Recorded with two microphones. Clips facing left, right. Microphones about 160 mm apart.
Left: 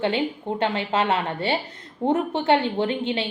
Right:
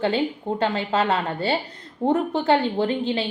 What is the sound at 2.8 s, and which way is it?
Speech, 35° right (ahead or behind).